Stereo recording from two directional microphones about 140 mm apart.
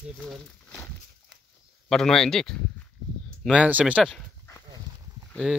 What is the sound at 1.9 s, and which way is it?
Speech, 5° left (ahead or behind).